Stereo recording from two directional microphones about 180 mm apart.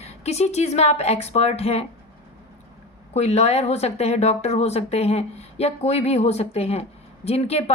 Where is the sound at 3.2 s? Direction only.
35° left (ahead or behind).